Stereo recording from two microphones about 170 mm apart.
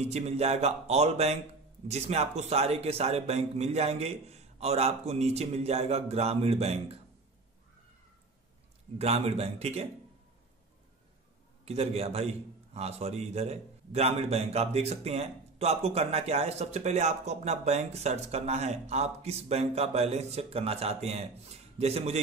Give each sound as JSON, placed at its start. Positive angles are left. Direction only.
{"t": 0.0, "sound": "a man's voice", "side_deg": -40}
{"t": 8.9, "sound": "a man's voice", "side_deg": -35}
{"t": 11.6, "sound": "a man's voice", "side_deg": -35}